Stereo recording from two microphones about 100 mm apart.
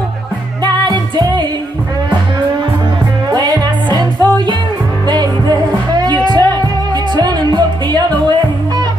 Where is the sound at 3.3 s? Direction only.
45° right (ahead or behind).